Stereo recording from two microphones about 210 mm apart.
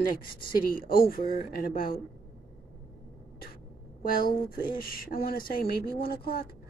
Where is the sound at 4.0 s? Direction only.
45° left (ahead or behind).